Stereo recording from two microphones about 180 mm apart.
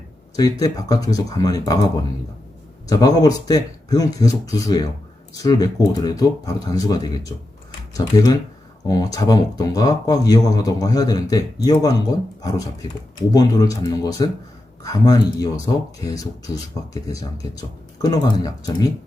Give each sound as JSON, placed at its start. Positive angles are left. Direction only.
{"t": 0.8, "sound": "speech", "side_deg": 20}